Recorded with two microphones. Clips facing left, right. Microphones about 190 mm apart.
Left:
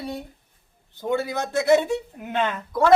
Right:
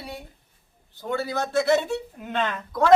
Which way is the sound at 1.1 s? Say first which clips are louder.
Left 2 dB; 20° left (ahead or behind).